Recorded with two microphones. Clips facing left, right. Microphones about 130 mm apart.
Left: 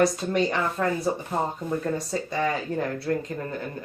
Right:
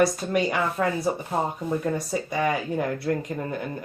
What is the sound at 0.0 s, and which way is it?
Speech, 10° right (ahead or behind).